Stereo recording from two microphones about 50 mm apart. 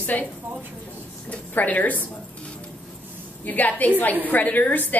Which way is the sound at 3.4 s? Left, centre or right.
Left.